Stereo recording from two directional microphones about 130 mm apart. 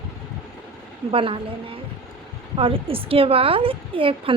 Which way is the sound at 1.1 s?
45° right (ahead or behind).